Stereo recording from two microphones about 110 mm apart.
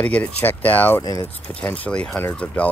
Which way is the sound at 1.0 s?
35° left (ahead or behind).